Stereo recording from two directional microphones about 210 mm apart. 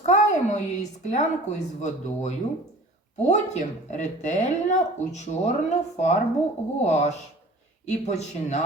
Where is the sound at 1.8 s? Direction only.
35° left (ahead or behind).